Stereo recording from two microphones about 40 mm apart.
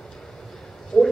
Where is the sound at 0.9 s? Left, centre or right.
Left.